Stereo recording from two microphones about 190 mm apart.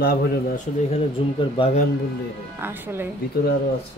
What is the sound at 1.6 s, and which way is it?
Speech, 25° left (ahead or behind).